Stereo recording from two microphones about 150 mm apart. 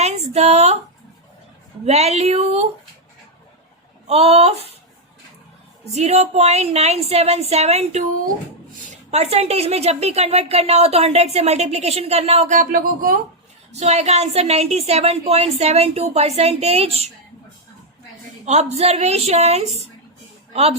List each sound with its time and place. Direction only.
0.0 s a sound: 45° right (ahead or behind)
1.8 s a woman's voice: 45° right (ahead or behind)
4.0 s a woman's voice: 45° right (ahead or behind)
5.8 s a woman's voice: 45° right (ahead or behind)
9.0 s a woman's voice: 45° right (ahead or behind); by 13.1 s 70° right (ahead or behind)
13.7 s a woman's voice: 45° right (ahead or behind)
18.4 s a woman's voice: 45° right (ahead or behind)